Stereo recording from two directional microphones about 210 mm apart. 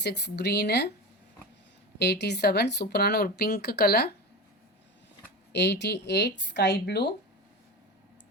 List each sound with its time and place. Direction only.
0.0 s speech: 55° left (ahead or behind)
2.0 s speech: 50° left (ahead or behind)
5.5 s speech: 55° left (ahead or behind)